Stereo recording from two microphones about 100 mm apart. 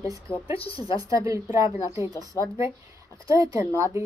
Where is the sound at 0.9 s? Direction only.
35° right (ahead or behind).